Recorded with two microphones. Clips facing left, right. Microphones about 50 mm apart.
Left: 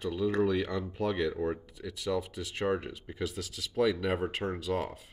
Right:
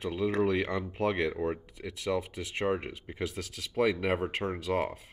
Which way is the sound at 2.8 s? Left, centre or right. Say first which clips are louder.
Right 1 dB; right.